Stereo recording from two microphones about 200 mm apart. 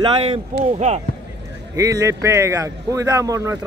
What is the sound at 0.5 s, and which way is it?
Speech, 40° right (ahead or behind).